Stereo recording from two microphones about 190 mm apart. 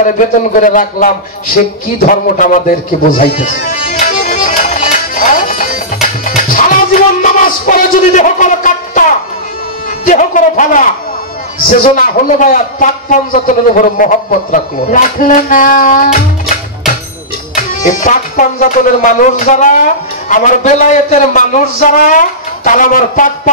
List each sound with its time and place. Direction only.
0.6 s a man's voice: 45° left (ahead or behind)
4.0 s music: 45° left (ahead or behind)
10.0 s a sound: 40° left (ahead or behind)
11.6 s a man's voice: 45° left (ahead or behind)
17.6 s a man's voice: 45° left (ahead or behind)